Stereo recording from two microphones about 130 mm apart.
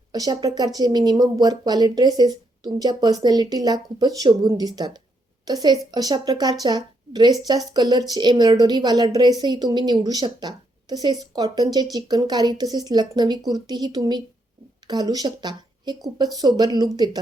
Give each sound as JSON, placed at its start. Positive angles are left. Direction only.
{"t": 0.1, "sound": "a woman's voice", "side_deg": -30}